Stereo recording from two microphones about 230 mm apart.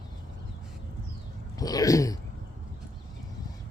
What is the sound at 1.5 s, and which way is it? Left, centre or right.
Speech, centre.